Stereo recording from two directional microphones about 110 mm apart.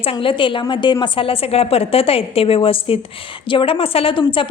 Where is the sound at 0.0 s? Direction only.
55° left (ahead or behind).